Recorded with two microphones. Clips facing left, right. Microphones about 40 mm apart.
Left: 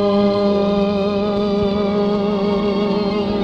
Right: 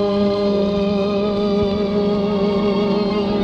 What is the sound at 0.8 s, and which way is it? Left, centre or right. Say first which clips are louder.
Music: even; centre.